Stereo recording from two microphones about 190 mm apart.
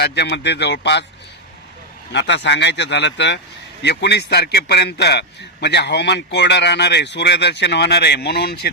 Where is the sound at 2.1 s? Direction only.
70° left (ahead or behind).